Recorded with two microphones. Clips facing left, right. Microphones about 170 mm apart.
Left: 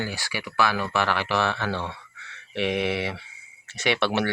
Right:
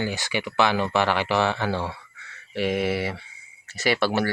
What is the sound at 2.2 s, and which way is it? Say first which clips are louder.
Speech: right 1 dB; centre (ahead or behind).